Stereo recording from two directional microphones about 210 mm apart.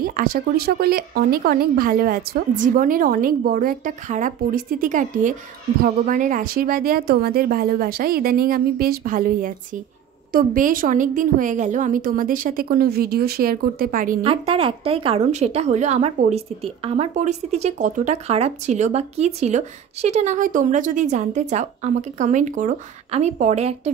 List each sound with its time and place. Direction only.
0.0 s a woman's voice: 45° right (ahead or behind)
14.2 s a woman's voice: 25° right (ahead or behind)